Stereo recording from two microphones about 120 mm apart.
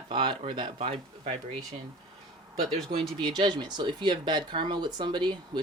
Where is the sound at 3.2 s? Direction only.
40° right (ahead or behind).